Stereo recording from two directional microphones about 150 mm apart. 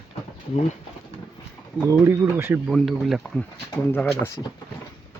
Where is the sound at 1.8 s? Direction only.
15° right (ahead or behind).